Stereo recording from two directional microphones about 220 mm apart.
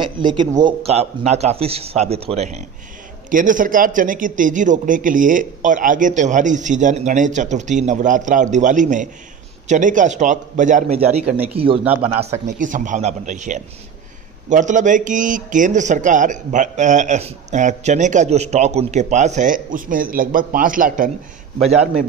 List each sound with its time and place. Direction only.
0.0 s speech: 20° right (ahead or behind)
11.8 s speech: 5° right (ahead or behind)
12.2 s speech: 30° right (ahead or behind)